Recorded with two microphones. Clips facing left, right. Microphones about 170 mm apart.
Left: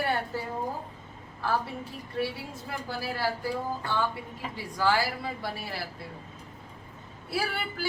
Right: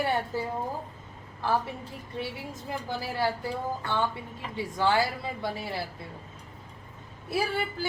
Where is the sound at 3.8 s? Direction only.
25° right (ahead or behind).